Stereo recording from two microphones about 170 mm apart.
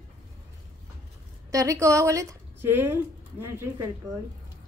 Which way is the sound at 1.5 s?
20° right (ahead or behind).